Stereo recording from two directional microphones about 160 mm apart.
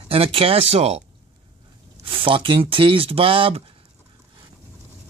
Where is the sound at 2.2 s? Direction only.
30° right (ahead or behind).